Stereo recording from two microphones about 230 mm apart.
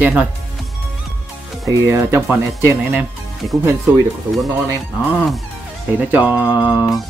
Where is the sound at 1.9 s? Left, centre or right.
Centre.